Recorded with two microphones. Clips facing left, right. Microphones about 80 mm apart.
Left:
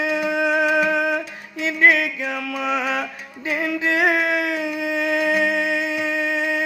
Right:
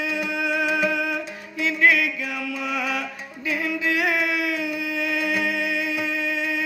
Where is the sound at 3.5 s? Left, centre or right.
Left.